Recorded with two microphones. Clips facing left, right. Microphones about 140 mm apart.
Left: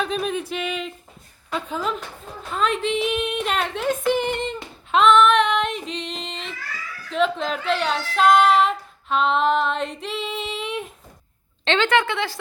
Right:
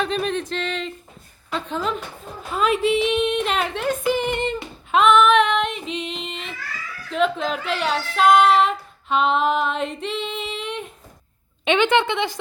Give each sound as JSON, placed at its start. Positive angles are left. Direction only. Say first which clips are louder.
{"t": 0.0, "sound": "speech", "louder": "right 1 dB", "side_deg": 5}
{"t": 2.5, "sound": "female singing", "louder": "right 3 dB", "side_deg": -5}
{"t": 7.1, "sound": "speech", "louder": "right 1 dB", "side_deg": 0}
{"t": 11.6, "sound": "a woman's voice", "louder": "right 2 dB", "side_deg": -15}